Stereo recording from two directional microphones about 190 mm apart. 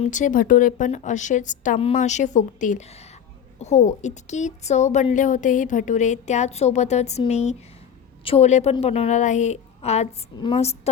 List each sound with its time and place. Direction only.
0.0 s a woman's voice: 40° left (ahead or behind)